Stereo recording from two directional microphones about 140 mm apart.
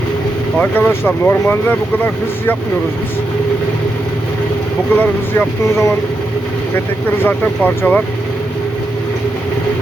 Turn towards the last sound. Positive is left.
turn(degrees=15)  # may be behind; listen again after turning